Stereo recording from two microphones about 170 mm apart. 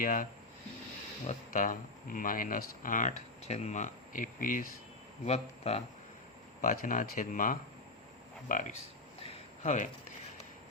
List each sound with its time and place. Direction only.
0.0 s speech: 55° left (ahead or behind)
1.3 s speech: 50° left (ahead or behind)
5.2 s speech: 40° left (ahead or behind)
6.6 s speech: 55° left (ahead or behind)
9.2 s a sound: 45° left (ahead or behind)